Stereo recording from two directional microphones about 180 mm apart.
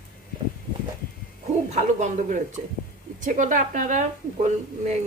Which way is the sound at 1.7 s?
40° right (ahead or behind).